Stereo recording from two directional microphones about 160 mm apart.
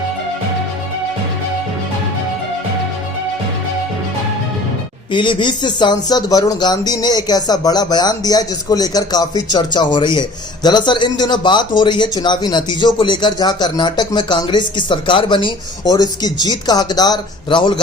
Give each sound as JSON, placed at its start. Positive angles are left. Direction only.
{"t": 5.1, "sound": "speech", "side_deg": 30}